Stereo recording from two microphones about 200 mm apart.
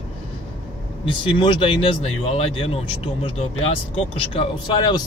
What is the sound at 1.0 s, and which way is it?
Speech, 25° left (ahead or behind).